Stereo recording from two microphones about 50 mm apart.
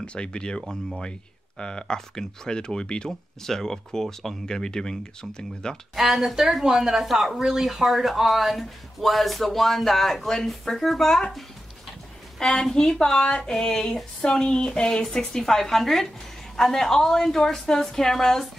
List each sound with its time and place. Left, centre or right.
0.0 s speech: left
0.7 s speech: centre
1.6 s speech: centre
5.9 s speech: centre
12.4 s speech: centre